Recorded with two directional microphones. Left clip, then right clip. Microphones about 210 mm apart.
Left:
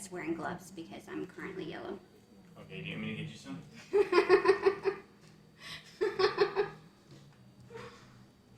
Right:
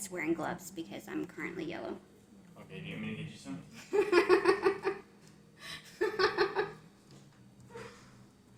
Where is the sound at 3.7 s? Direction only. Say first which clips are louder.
Even; 45° right (ahead or behind).